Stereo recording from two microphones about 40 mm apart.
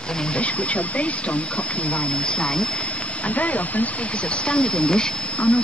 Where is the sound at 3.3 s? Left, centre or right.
Left.